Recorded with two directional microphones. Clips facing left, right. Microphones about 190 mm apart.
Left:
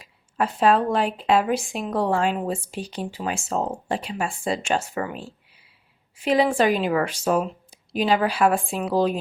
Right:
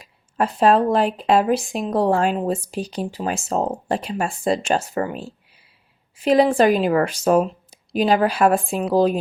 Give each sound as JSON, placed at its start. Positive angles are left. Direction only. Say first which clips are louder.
{"t": 0.0, "sound": "a woman's voice", "louder": "right 3 dB", "side_deg": -40}